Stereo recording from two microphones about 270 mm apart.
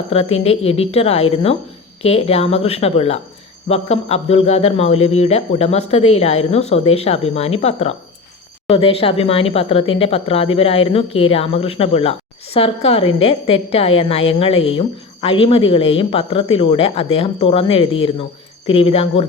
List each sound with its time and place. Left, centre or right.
0.1 s a woman's voice: left